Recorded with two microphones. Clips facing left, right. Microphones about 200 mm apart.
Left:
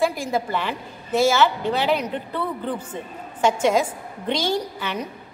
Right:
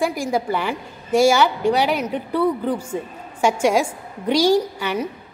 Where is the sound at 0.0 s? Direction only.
10° right (ahead or behind).